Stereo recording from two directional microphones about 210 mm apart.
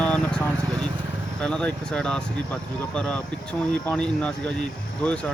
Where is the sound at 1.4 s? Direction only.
5° left (ahead or behind).